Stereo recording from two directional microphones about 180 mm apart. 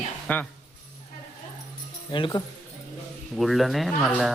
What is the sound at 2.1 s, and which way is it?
Speech, 25° left (ahead or behind).